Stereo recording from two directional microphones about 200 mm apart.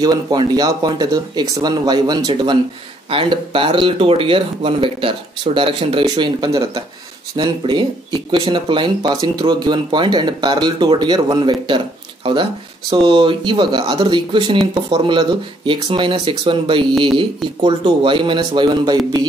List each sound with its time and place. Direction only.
0.0 s speech: 20° right (ahead or behind)
12.9 s speech: 25° right (ahead or behind)